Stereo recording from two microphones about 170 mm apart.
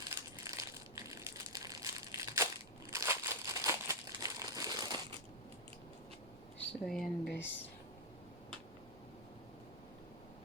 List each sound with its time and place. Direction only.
0.1 s crushing: 20° right (ahead or behind)
2.9 s crumpling: 15° right (ahead or behind)
6.6 s speech: 5° left (ahead or behind)